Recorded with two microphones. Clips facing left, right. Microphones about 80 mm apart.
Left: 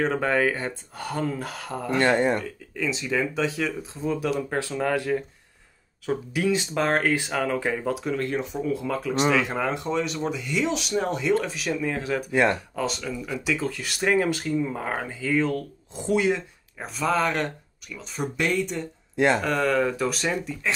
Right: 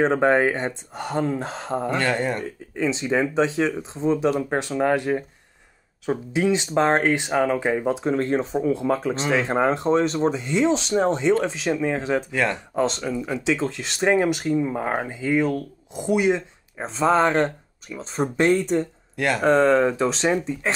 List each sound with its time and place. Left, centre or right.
0.0 s speech: right
2.0 s speech: left
2.3 s speech: right
12.3 s speech: left
12.7 s speech: right
19.1 s speech: left
19.4 s speech: right